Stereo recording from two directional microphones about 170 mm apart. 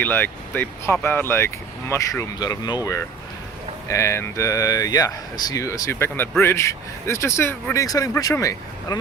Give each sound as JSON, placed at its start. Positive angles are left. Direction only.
{"t": 0.0, "sound": "speech", "side_deg": 10}
{"t": 3.8, "sound": "speech", "side_deg": 15}